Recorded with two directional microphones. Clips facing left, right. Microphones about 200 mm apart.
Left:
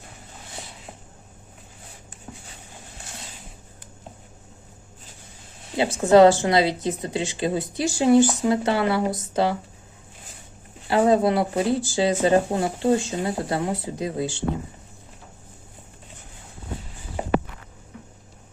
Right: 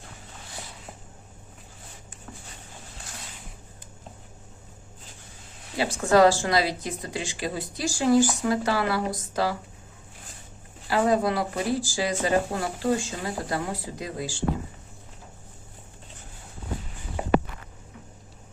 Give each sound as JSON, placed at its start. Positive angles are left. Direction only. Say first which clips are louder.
{"t": 5.7, "sound": "a woman's voice", "louder": "left 5 dB", "side_deg": 20}
{"t": 10.8, "sound": "a woman's voice", "louder": "left 4 dB", "side_deg": 25}